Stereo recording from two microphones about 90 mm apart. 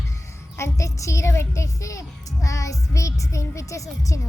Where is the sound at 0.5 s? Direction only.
35° left (ahead or behind).